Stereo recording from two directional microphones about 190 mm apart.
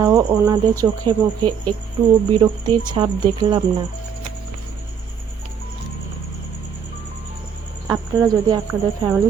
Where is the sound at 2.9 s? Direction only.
20° right (ahead or behind).